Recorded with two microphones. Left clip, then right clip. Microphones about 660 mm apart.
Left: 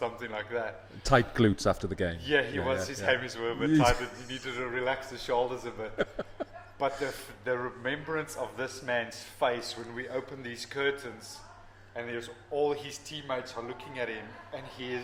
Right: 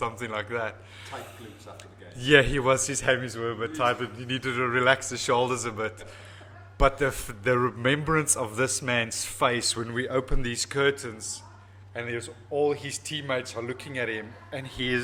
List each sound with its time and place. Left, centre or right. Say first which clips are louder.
0.0 s a man's voice: right 4 dB; right
2.2 s a man's voice: right 10 dB; right